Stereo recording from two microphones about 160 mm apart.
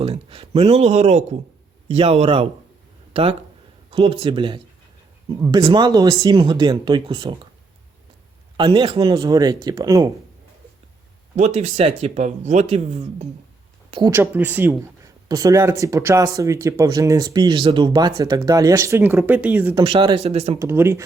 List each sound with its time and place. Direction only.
0.0 s speech: 35° right (ahead or behind)
8.5 s speech: 30° right (ahead or behind)
11.3 s speech: 45° right (ahead or behind)
14.1 s speech: 15° right (ahead or behind)
19.7 s speech: 30° right (ahead or behind)
20.1 s speech: 40° right (ahead or behind)
20.6 s speech: 15° right (ahead or behind)